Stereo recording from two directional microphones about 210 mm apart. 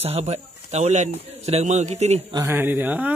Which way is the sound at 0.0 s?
30° right (ahead or behind).